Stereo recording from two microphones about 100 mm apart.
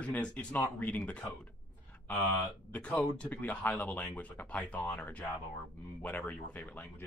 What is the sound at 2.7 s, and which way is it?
Speech, 15° left (ahead or behind).